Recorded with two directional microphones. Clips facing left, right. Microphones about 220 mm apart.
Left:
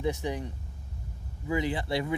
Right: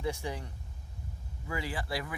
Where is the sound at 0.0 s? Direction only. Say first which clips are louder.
Left 5 dB; 20° left (ahead or behind).